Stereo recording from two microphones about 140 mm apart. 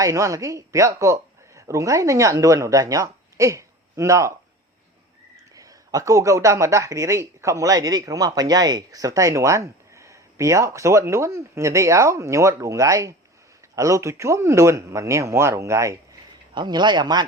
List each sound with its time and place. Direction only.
0.0 s speech: 20° right (ahead or behind)
5.5 s speech: 25° right (ahead or behind)
16.6 s speech: 30° right (ahead or behind)